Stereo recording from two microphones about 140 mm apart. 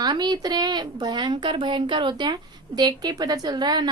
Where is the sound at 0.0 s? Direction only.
30° right (ahead or behind).